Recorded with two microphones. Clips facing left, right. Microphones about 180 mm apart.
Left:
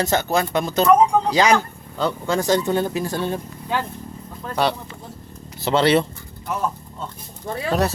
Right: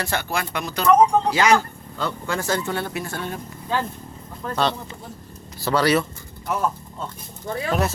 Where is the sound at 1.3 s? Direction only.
15° left (ahead or behind).